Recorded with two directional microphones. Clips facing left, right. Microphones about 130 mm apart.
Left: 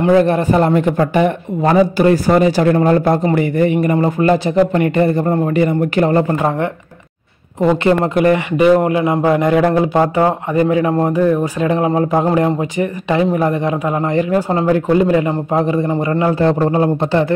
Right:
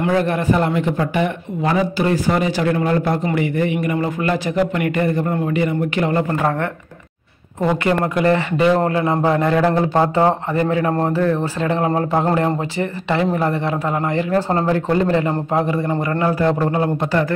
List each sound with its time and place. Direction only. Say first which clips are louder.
0.0 s speech: left 6 dB; 30° left (ahead or behind)
6.3 s speech: left 3 dB; 20° left (ahead or behind)